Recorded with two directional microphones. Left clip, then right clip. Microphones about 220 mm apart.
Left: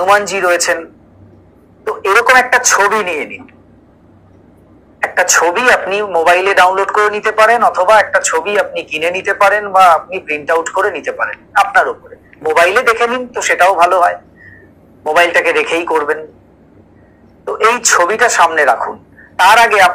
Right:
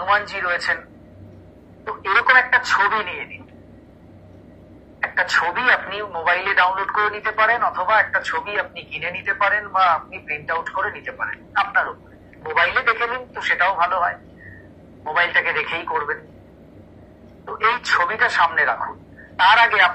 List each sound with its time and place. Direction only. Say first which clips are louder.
0.0 s a man's voice: left 9 dB; 35° left (ahead or behind)
1.9 s a man's voice: left 7 dB; 35° left (ahead or behind)
5.0 s a man's voice: left 8 dB; 35° left (ahead or behind)
17.5 s speech: left 8 dB; 35° left (ahead or behind)